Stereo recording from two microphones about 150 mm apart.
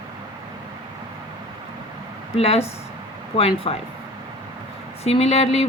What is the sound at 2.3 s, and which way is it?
Speech, 40° left (ahead or behind).